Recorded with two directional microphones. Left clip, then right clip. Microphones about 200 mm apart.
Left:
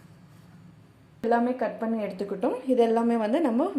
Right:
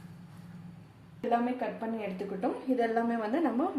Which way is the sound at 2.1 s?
35° left (ahead or behind).